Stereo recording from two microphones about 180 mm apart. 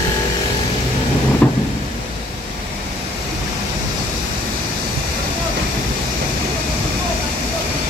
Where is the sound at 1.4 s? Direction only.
5° left (ahead or behind).